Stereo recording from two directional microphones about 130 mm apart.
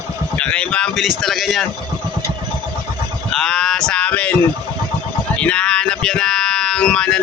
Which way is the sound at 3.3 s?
5° left (ahead or behind).